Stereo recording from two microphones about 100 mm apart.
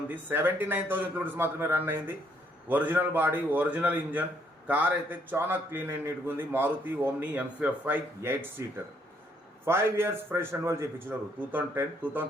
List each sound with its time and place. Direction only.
0.3 s a man's voice: 20° right (ahead or behind)
9.6 s a man's voice: 25° right (ahead or behind)